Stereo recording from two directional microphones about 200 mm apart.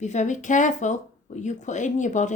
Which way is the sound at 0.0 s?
35° left (ahead or behind).